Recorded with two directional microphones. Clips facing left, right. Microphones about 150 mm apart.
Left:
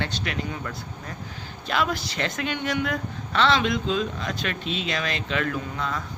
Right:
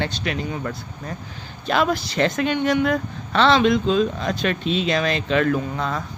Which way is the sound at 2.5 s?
30° right (ahead or behind).